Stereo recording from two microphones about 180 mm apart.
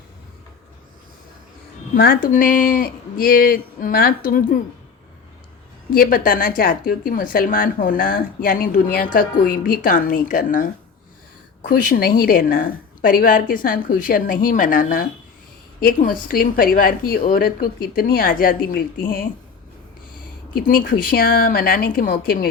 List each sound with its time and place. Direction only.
2.0 s speech: 50° left (ahead or behind)
5.9 s speech: 55° left (ahead or behind)
20.6 s speech: 50° left (ahead or behind)